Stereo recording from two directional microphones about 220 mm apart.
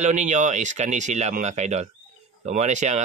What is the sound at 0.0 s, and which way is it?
Speech, 30° right (ahead or behind).